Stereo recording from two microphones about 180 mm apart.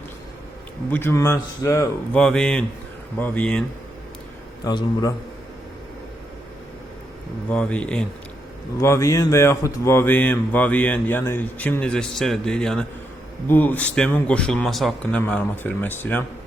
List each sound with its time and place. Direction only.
0.9 s speech: 10° left (ahead or behind)
2.1 s speech: 5° left (ahead or behind)
4.6 s a man's voice: 25° left (ahead or behind)
7.5 s speech: 5° left (ahead or behind)
8.8 s speech: 15° left (ahead or behind)